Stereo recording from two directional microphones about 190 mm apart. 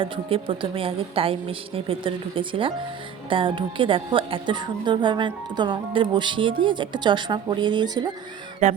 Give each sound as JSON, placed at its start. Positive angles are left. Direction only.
{"t": 0.0, "sound": "a woman's voice", "side_deg": -30}
{"t": 8.6, "sound": "music", "side_deg": -40}